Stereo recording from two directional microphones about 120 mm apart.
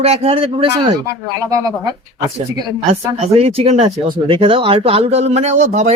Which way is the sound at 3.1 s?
60° right (ahead or behind).